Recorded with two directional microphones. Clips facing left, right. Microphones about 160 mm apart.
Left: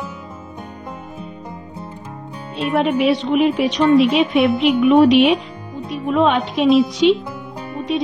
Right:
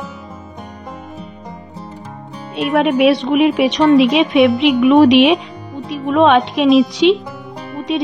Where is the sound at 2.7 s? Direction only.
70° right (ahead or behind).